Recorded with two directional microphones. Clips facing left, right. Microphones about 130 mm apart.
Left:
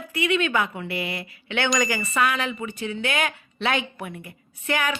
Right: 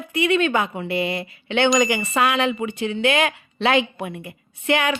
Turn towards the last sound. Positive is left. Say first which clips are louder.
# right 5 dB
turn(degrees=-25)  # may be behind; listen again after turning